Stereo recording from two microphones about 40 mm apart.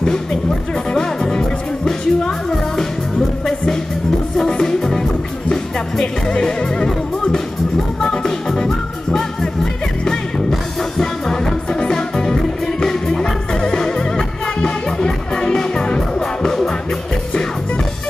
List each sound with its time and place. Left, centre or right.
0.0 s music: centre
4.5 s music: centre
10.5 s music: centre